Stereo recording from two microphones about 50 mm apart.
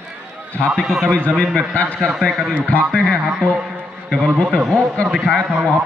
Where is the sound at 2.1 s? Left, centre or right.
Centre.